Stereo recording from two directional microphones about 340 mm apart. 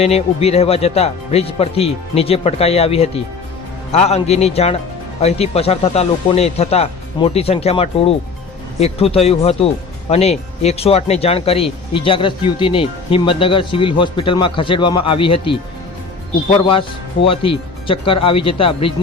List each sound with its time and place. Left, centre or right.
0.0 s speech: centre
17.2 s speech: centre